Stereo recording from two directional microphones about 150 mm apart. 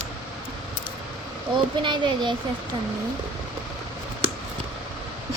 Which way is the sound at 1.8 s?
30° right (ahead or behind).